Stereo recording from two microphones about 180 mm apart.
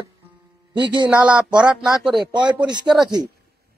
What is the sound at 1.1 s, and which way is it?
Speech, 5° right (ahead or behind).